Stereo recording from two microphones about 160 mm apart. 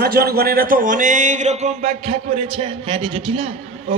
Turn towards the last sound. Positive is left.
turn(degrees=-35)  # may be behind; listen again after turning